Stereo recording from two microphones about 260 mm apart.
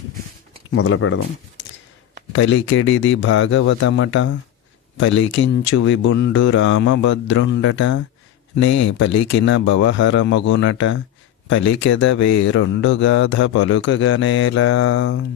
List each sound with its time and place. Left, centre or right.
0.7 s speech: left
2.3 s speech: left